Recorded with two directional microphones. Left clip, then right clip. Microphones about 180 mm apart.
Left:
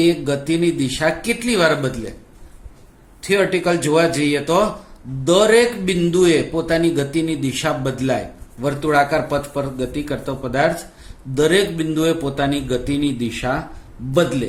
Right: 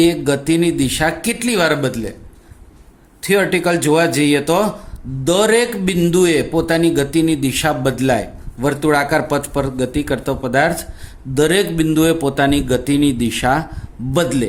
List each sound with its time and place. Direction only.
0.0 s a man's voice: 50° right (ahead or behind)
3.2 s a man's voice: 45° right (ahead or behind)